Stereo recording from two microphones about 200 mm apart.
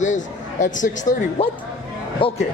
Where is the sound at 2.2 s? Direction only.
25° left (ahead or behind).